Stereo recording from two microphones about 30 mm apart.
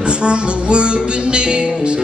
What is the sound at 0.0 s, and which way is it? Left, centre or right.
Music, right.